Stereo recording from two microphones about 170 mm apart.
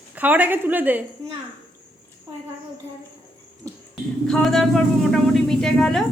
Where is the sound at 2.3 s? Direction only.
25° right (ahead or behind).